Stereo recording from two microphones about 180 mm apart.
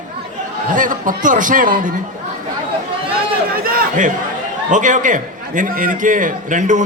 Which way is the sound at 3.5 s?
55° right (ahead or behind).